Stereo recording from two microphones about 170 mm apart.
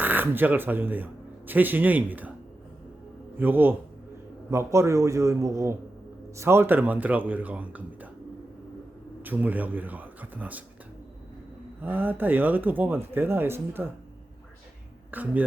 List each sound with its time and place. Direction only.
0.0 s speech: 10° right (ahead or behind)
3.3 s speech: 10° right (ahead or behind)
9.2 s speech: 10° right (ahead or behind)
11.8 s speech: 10° right (ahead or behind)
15.1 s speech: 10° right (ahead or behind)